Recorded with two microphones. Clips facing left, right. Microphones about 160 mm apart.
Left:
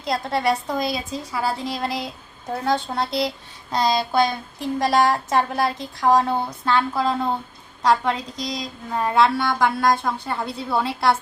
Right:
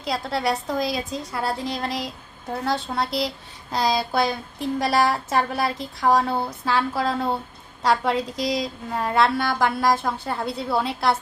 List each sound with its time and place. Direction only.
0.0 s a woman's voice: centre (ahead or behind)